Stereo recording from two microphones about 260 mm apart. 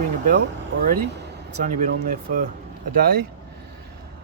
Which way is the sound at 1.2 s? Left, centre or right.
Right.